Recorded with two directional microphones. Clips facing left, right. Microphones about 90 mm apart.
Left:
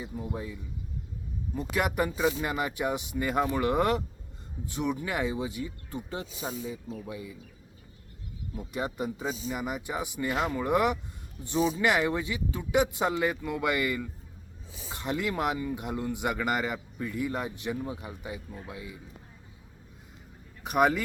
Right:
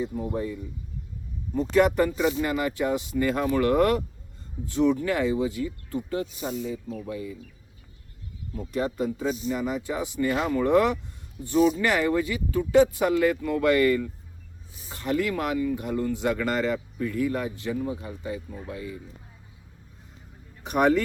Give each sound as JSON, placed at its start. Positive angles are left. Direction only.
{"t": 1.5, "sound": "speech", "side_deg": 10}
{"t": 8.5, "sound": "speech", "side_deg": 15}
{"t": 20.7, "sound": "speech", "side_deg": 5}